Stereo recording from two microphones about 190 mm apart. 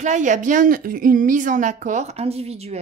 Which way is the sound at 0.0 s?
40° right (ahead or behind).